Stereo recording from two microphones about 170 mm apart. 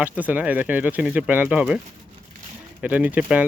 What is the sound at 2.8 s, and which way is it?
Speech, 10° right (ahead or behind).